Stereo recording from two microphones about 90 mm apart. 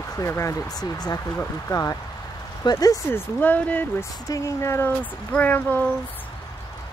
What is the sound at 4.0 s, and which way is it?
Speech, 35° left (ahead or behind).